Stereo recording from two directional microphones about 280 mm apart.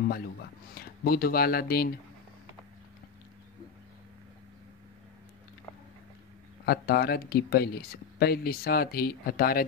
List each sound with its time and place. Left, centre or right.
0.0 s speech: left
6.6 s speech: left